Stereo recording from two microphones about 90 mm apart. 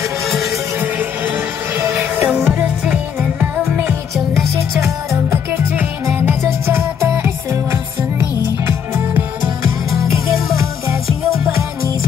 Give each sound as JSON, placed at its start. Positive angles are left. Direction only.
{"t": 0.7, "sound": "music", "side_deg": -20}
{"t": 4.3, "sound": "music", "side_deg": 0}
{"t": 6.0, "sound": "music", "side_deg": -25}